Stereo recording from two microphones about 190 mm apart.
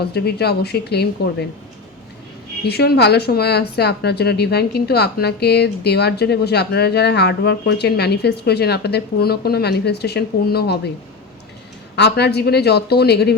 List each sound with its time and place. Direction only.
0.0 s speech: 55° left (ahead or behind)
2.6 s speech: 55° left (ahead or behind)
11.9 s speech: 60° left (ahead or behind)